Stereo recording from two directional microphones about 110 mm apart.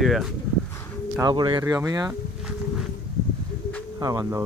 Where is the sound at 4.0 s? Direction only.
30° right (ahead or behind).